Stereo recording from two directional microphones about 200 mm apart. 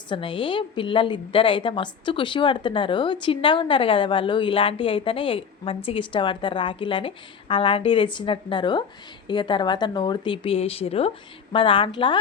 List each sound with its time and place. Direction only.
0.1 s a woman's voice: 25° left (ahead or behind)